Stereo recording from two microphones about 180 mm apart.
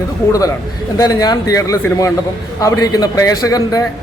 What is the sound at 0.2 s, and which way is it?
A man's voice, 15° left (ahead or behind).